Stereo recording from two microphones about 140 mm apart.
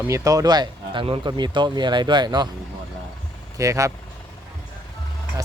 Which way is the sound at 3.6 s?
20° right (ahead or behind).